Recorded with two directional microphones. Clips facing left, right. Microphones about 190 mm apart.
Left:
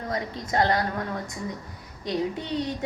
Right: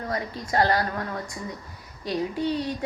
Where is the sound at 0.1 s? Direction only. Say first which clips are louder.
Even; 20° left (ahead or behind).